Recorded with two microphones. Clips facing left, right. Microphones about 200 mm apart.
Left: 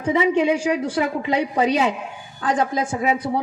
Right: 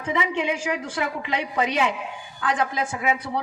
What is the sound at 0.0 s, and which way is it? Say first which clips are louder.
A woman's voice: left 7 dB; 35° left (ahead or behind).